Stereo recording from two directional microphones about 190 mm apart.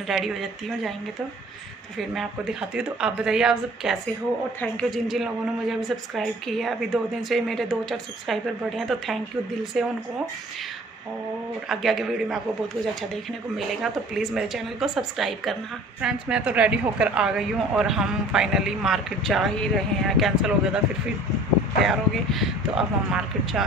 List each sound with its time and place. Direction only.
0.1 s a woman's voice: centre (ahead or behind)
2.0 s a woman's voice: centre (ahead or behind)
11.7 s a woman's voice: centre (ahead or behind)
21.8 s a woman's voice: centre (ahead or behind)